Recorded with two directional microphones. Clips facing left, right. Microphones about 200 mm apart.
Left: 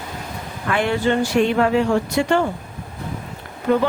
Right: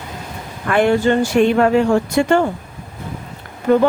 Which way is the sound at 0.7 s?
50° right (ahead or behind).